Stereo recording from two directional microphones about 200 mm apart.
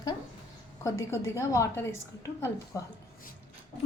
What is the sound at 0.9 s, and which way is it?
A woman's voice, 15° left (ahead or behind).